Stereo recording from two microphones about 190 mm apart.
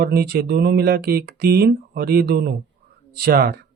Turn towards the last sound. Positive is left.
turn(degrees=-55)  # may be behind; listen again after turning